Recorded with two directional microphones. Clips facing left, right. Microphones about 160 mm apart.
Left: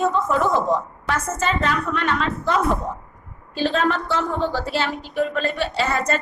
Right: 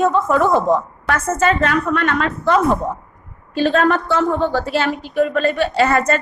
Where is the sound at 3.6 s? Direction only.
55° right (ahead or behind).